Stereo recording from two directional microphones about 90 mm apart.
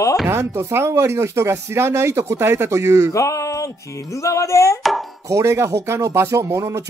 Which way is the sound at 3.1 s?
35° left (ahead or behind).